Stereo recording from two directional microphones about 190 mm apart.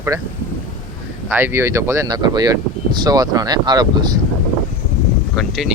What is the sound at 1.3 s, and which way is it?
Speech, 10° right (ahead or behind).